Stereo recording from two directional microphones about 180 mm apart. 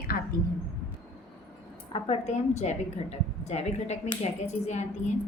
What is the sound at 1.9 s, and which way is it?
A woman's voice, 35° left (ahead or behind).